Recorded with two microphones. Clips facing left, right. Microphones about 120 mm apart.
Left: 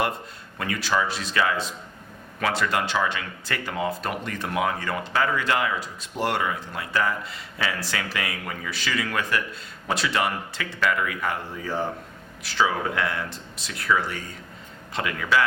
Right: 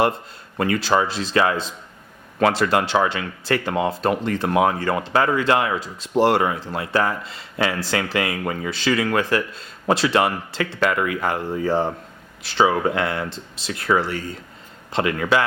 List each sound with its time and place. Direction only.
0.5 s speech: 35° right (ahead or behind)